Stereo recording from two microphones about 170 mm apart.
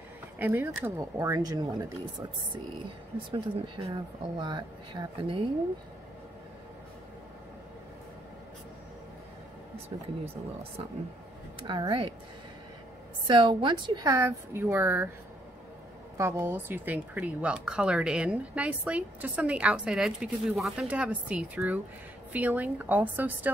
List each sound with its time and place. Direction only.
0.4 s speech: 10° right (ahead or behind)
3.3 s speech: 30° right (ahead or behind)
11.6 s speech: 25° right (ahead or behind)
13.3 s speech: 30° right (ahead or behind)
16.2 s speech: 15° right (ahead or behind)